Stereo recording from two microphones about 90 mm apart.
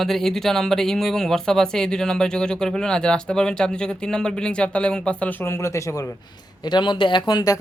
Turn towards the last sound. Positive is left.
turn(degrees=45)  # may be behind; listen again after turning